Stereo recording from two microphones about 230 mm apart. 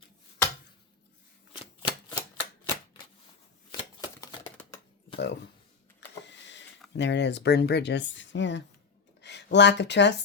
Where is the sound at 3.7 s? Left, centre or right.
Centre.